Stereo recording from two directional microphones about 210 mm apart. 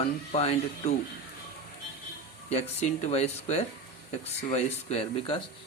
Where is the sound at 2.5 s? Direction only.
30° left (ahead or behind).